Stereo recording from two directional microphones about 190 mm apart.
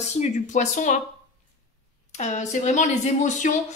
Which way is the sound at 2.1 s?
40° left (ahead or behind).